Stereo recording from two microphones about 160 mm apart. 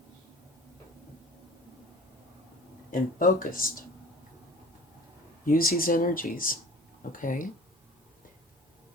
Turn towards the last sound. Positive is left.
turn(degrees=55)  # may be behind; listen again after turning